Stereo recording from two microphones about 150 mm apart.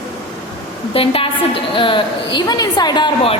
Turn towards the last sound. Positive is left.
turn(degrees=30)  # may be behind; listen again after turning